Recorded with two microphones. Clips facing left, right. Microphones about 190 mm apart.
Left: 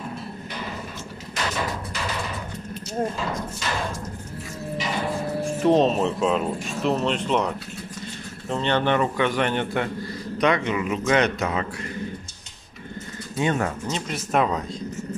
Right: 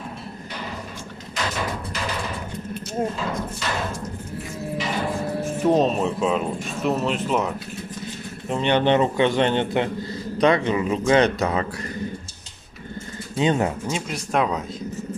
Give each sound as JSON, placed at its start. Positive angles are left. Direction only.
{"t": 3.0, "sound": "speech", "side_deg": -5}
{"t": 5.4, "sound": "speech", "side_deg": 0}
{"t": 8.5, "sound": "a man's voice", "side_deg": -15}
{"t": 13.4, "sound": "speech", "side_deg": -20}
{"t": 14.1, "sound": "speech", "side_deg": 0}